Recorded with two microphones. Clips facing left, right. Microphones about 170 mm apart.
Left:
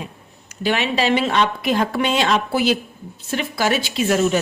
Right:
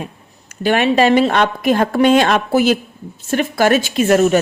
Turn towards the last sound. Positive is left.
turn(degrees=-55)  # may be behind; listen again after turning